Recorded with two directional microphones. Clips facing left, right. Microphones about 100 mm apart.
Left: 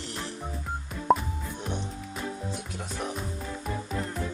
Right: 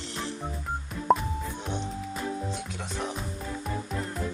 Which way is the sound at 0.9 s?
Centre (ahead or behind).